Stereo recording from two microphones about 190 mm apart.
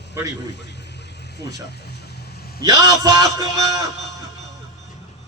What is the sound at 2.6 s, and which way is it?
A man's voice, 20° right (ahead or behind).